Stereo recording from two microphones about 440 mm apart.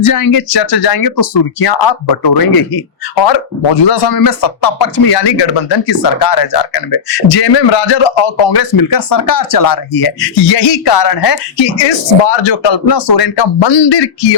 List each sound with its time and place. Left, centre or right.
0.1 s speech: left
3.2 s speech: left
4.3 s speech: left
7.3 s speech: left
8.5 s speech: left
9.9 s speech: left
10.9 s speech: left
11.5 s speech: left
13.1 s speech: left